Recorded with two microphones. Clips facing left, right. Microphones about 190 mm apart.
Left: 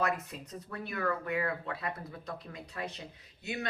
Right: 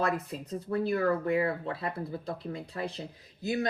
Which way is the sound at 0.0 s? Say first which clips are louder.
Right 3 dB; 30° right (ahead or behind).